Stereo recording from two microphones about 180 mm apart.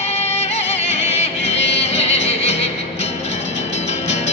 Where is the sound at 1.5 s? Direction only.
80° left.